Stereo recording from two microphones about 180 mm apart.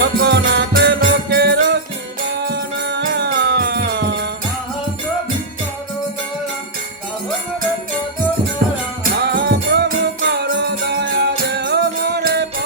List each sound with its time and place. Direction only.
0.0 s music: 70° right (ahead or behind)
9.0 s music: 65° right (ahead or behind)